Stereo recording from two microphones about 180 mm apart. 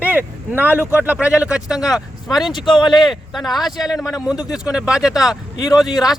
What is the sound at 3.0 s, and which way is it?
A man's voice, centre (ahead or behind).